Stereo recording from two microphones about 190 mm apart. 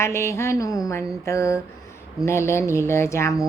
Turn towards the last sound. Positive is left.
turn(degrees=15)  # may be behind; listen again after turning